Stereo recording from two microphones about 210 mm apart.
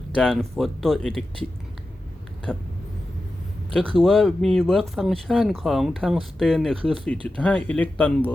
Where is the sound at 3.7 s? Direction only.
Centre (ahead or behind).